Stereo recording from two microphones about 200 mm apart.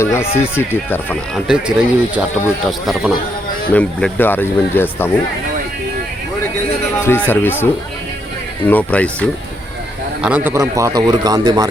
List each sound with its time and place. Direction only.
0.0 s speech: 15° left (ahead or behind)
1.5 s speech: 5° right (ahead or behind)
7.0 s speech: 10° left (ahead or behind)
10.2 s a man's voice: 5° right (ahead or behind)